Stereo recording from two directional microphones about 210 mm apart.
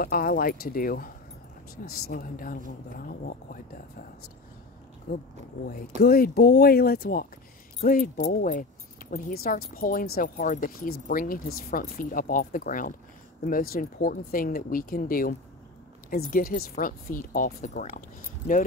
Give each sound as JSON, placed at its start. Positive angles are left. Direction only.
{"t": 0.0, "sound": "speech", "side_deg": 45}
{"t": 5.1, "sound": "speech", "side_deg": 45}